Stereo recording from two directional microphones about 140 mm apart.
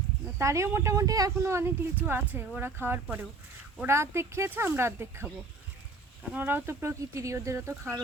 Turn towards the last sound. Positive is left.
turn(degrees=-20)  # may be behind; listen again after turning